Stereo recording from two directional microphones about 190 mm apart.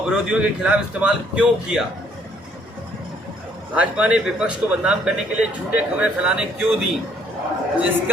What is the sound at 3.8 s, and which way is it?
A man's voice, 5° right (ahead or behind).